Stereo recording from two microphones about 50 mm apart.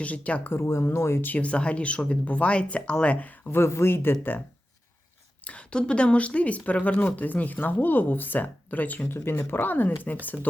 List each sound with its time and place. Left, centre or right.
0.0 s speech: left
0.5 s speech: left
1.4 s speech: left
3.5 s speech: left
5.5 s speech: left
9.0 s speech: left